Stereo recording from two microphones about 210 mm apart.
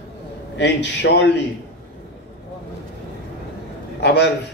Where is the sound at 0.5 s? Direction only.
55° left (ahead or behind).